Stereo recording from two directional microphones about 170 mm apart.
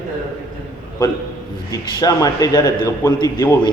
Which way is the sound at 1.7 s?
20° left (ahead or behind).